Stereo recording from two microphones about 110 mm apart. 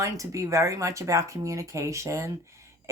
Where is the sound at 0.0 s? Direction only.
30° right (ahead or behind).